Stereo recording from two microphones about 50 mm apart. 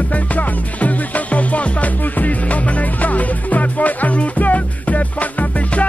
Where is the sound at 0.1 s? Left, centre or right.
Left.